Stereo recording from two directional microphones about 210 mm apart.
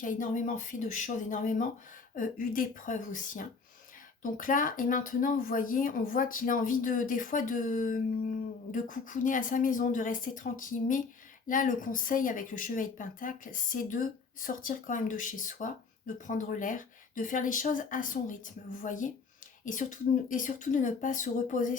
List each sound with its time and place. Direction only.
0.0 s speech: 40° left (ahead or behind)